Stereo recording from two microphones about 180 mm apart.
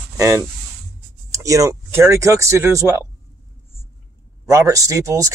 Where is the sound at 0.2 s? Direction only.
20° right (ahead or behind).